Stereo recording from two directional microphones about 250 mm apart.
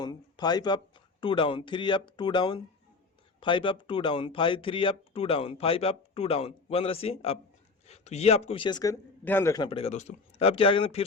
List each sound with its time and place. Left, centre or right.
0.0 s speech: centre